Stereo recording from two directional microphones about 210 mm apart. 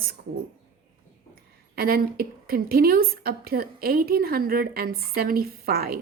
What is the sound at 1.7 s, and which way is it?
A woman's voice, 45° right (ahead or behind).